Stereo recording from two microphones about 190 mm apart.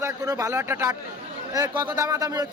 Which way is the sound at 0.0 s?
15° right (ahead or behind).